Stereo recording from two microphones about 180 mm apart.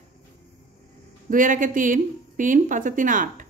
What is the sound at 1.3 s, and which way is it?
Speech, 45° right (ahead or behind).